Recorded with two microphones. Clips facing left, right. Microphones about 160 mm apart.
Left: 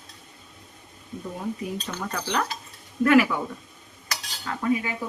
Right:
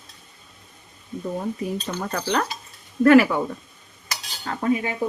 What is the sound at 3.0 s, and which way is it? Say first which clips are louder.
Speech: right 5 dB; 40° right (ahead or behind).